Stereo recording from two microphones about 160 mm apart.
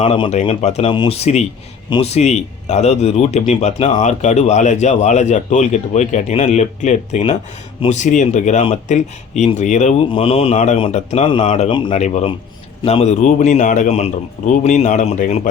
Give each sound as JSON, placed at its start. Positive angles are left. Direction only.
{"t": 0.0, "sound": "speech", "side_deg": 35}
{"t": 10.1, "sound": "speech", "side_deg": 35}
{"t": 13.2, "sound": "speech", "side_deg": 50}